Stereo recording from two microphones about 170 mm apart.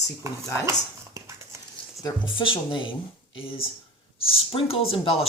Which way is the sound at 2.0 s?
30° left (ahead or behind).